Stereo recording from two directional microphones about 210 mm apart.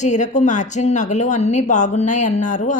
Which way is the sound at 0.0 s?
35° left (ahead or behind).